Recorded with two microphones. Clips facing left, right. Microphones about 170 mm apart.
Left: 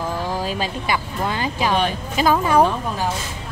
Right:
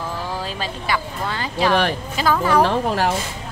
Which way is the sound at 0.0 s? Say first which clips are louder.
Left 3 dB; 15° left (ahead or behind).